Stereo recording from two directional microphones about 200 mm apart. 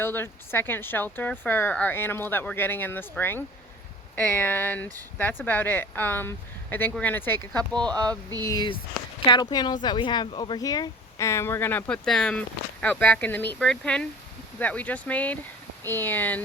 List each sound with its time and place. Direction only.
0.0 s speech: 10° left (ahead or behind)
7.8 s speech: 20° right (ahead or behind)
8.4 s speech: 20° left (ahead or behind)